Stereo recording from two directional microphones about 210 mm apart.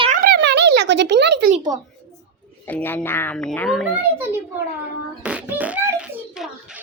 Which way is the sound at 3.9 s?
10° right (ahead or behind).